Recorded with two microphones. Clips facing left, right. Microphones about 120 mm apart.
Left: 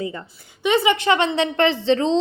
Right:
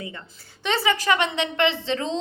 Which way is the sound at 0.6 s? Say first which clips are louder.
Left 5 dB; 15° left (ahead or behind).